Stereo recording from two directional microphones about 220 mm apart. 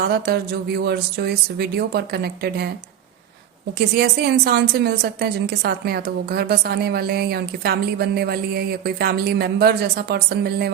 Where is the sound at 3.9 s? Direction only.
45° right (ahead or behind).